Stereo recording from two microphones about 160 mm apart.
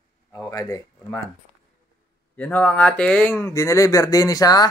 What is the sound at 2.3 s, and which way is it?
Speech, 10° left (ahead or behind).